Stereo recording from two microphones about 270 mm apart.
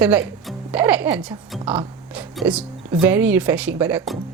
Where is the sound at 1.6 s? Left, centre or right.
Centre.